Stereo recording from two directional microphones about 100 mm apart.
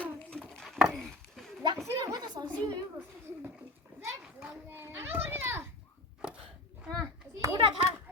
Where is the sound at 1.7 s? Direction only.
30° right (ahead or behind).